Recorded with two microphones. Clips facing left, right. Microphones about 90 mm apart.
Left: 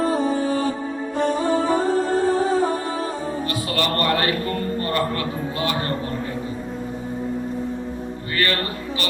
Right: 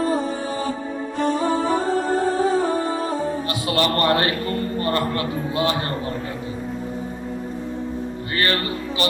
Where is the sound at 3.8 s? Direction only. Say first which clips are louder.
Right 2 dB; 25° right (ahead or behind).